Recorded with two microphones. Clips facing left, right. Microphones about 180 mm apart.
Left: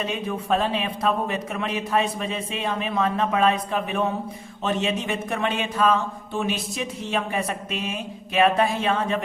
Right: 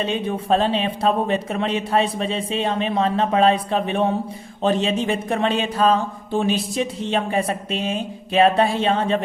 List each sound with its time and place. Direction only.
0.0 s speech: 30° right (ahead or behind)